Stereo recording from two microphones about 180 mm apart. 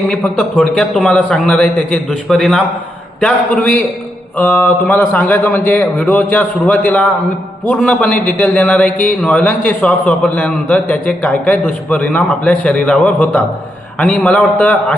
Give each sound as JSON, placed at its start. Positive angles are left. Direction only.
{"t": 0.1, "sound": "a man's voice", "side_deg": 5}